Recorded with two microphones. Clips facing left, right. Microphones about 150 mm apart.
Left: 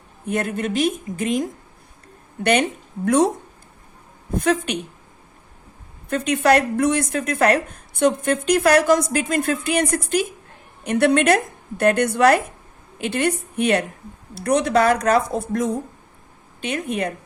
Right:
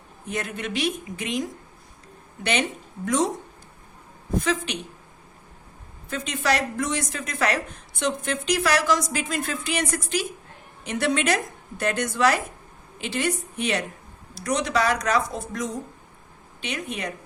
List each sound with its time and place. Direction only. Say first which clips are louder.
0.3 s a woman's voice: left 7 dB; 50° left (ahead or behind)
4.4 s a woman's voice: left 5 dB; 55° left (ahead or behind)
6.1 s a woman's voice: left 8 dB; 60° left (ahead or behind)